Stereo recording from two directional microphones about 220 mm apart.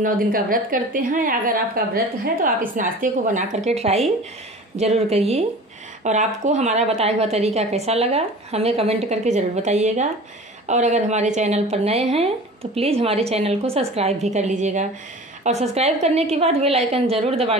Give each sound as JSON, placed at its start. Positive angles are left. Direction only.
{"t": 0.0, "sound": "a woman's voice", "side_deg": -40}